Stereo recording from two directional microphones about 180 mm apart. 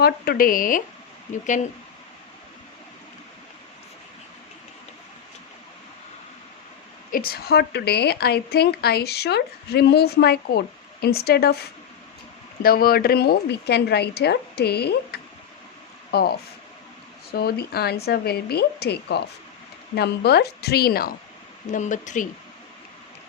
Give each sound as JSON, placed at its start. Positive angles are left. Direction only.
{"t": 0.0, "sound": "speech", "side_deg": 55}
{"t": 7.1, "sound": "a woman's voice", "side_deg": 55}
{"t": 21.7, "sound": "speech", "side_deg": 45}